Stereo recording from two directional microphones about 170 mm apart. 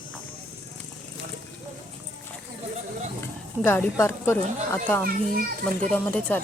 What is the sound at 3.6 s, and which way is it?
A woman's voice, 15° left (ahead or behind).